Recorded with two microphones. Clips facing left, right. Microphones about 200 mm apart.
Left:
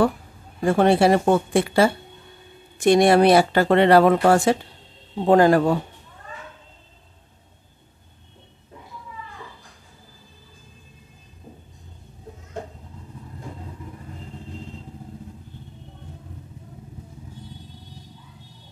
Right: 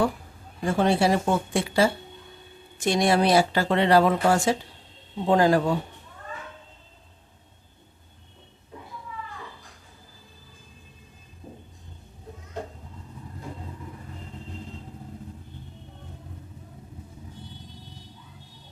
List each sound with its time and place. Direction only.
0.7 s speech: 60° left (ahead or behind)